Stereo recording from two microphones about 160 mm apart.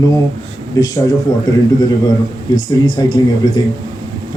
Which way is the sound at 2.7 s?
25° left (ahead or behind).